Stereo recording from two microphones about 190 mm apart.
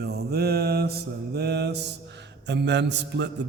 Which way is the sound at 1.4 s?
60° right (ahead or behind).